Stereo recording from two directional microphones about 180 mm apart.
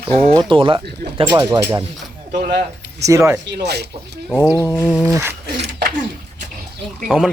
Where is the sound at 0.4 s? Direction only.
30° right (ahead or behind).